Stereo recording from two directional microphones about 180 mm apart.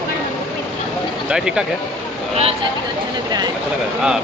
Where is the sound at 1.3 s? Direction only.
5° right (ahead or behind).